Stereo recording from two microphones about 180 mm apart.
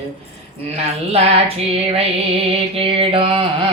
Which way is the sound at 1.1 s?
35° right (ahead or behind).